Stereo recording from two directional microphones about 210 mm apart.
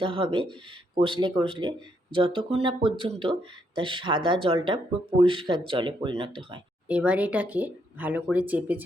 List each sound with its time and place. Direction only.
0.0 s speech: 25° right (ahead or behind)
6.8 s speech: 5° right (ahead or behind)